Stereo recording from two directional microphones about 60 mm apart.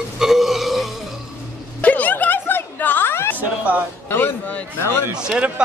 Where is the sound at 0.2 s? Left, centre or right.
Centre.